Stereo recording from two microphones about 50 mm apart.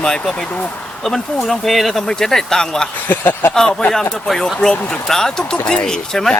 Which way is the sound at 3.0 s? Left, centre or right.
Left.